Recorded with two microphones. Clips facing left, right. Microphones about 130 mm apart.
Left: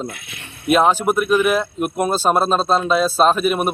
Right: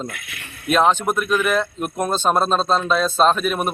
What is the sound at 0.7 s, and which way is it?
Speech, 5° left (ahead or behind).